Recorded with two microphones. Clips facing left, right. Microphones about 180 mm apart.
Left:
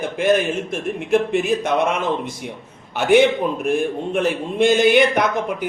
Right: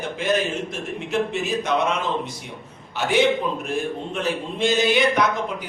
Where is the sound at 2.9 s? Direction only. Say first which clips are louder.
Left 5 dB; 55° left (ahead or behind).